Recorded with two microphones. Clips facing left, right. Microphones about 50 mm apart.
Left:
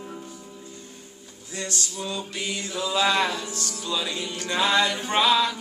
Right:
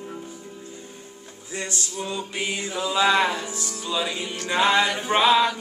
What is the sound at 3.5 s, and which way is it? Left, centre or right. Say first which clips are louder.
Music: right 2 dB; centre.